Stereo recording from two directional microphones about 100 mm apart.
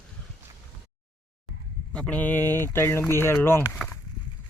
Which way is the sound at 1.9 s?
10° left (ahead or behind).